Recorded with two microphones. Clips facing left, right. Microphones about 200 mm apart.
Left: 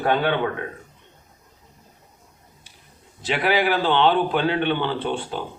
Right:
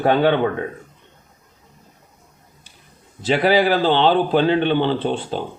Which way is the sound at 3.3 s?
35° right (ahead or behind).